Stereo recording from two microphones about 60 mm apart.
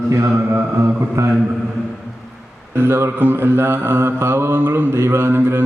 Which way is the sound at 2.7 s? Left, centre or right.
Right.